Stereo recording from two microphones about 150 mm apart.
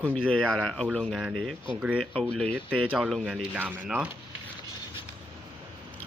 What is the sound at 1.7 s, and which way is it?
Speech, 30° left (ahead or behind).